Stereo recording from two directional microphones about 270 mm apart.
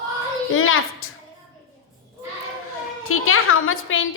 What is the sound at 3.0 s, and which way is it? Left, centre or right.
A woman's voice, left.